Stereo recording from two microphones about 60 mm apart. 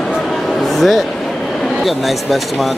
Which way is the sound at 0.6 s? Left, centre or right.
Centre.